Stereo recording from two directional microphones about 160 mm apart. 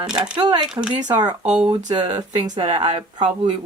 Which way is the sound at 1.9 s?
30° right (ahead or behind).